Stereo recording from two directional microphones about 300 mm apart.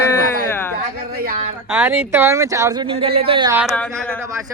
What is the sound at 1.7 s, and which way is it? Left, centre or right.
Speech, centre.